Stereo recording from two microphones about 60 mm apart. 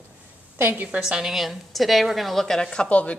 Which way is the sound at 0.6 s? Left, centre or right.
Right.